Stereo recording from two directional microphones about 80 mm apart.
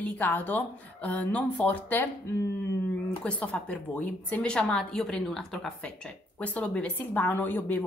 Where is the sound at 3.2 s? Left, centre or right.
Centre.